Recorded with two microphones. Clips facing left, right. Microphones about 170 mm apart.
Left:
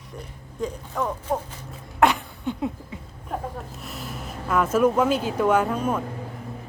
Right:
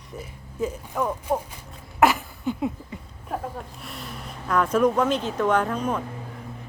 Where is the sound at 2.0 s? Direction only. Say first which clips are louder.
Even; centre (ahead or behind).